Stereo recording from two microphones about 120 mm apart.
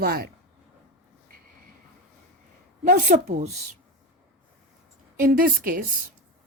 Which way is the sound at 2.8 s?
90° right.